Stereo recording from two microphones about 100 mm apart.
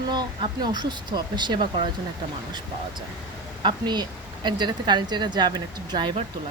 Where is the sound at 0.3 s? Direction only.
55° right (ahead or behind).